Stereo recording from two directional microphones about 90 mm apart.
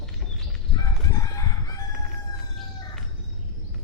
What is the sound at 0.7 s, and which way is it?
Chicken, 40° left (ahead or behind).